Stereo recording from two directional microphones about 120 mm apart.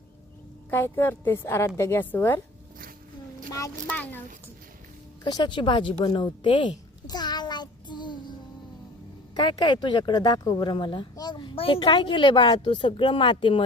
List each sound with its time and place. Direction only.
0.7 s a woman's voice: 15° left (ahead or behind)
3.8 s a woman's voice: 15° left (ahead or behind)
5.2 s a sound: 40° left (ahead or behind)
9.3 s speech: 35° left (ahead or behind)